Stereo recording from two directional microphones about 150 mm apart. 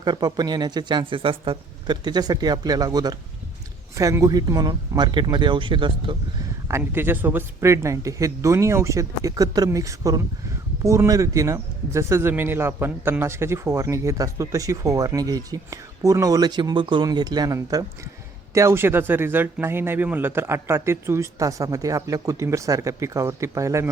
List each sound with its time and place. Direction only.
0.0 s speech: 25° right (ahead or behind)
6.7 s speech: 15° right (ahead or behind)